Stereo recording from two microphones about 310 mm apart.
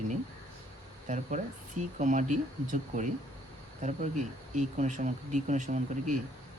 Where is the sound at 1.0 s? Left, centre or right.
Right.